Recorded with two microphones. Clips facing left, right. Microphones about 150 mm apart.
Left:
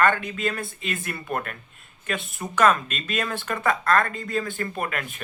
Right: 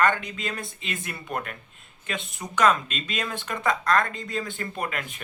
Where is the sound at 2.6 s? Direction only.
50° left (ahead or behind).